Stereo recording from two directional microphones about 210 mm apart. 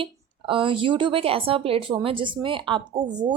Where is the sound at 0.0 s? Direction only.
25° right (ahead or behind).